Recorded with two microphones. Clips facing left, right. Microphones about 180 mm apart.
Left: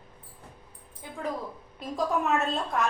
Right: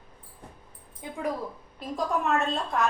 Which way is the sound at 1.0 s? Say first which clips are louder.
Right 4 dB; 20° right (ahead or behind).